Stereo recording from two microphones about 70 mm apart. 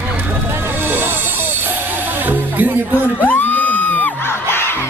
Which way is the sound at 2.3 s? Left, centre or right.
Right.